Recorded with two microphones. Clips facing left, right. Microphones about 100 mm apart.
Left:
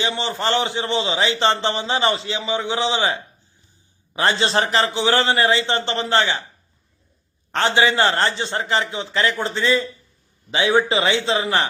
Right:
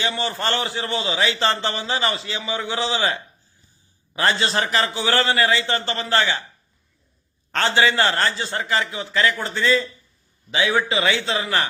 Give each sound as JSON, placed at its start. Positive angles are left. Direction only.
{"t": 0.0, "sound": "a man's voice", "side_deg": 20}
{"t": 7.5, "sound": "a man's voice", "side_deg": 20}